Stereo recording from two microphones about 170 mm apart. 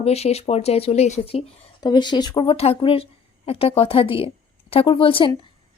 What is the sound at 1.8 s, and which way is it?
Speech, 25° left (ahead or behind).